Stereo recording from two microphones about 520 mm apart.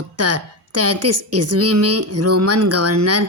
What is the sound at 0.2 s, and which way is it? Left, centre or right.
A woman's voice, right.